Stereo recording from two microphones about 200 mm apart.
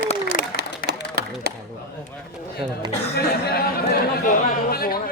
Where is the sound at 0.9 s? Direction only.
50° right (ahead or behind).